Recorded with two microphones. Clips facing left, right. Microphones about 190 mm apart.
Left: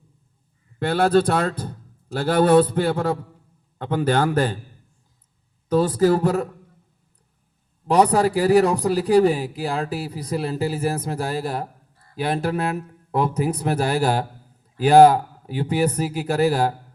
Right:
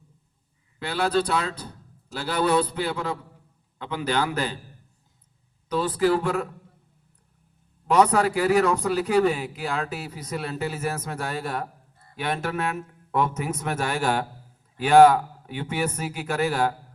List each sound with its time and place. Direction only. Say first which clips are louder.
0.8 s a man's voice: left 6 dB; 50° left (ahead or behind)
5.6 s a man's voice: left 5 dB; 45° left (ahead or behind)
7.9 s a man's voice: left 3 dB; 35° left (ahead or behind)